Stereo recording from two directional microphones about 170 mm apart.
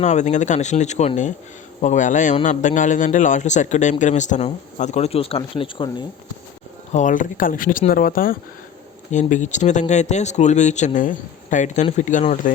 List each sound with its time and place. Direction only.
0.0 s speech: 45° left (ahead or behind)
6.9 s speech: 50° left (ahead or behind)
9.1 s speech: 45° left (ahead or behind)